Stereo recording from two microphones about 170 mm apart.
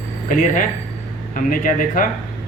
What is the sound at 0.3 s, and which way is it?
Speech, 50° left (ahead or behind).